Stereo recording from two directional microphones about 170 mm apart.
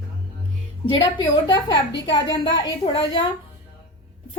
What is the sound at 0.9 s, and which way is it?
A woman's voice, 30° left (ahead or behind).